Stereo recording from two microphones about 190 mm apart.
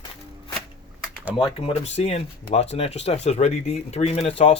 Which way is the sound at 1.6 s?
35° left (ahead or behind).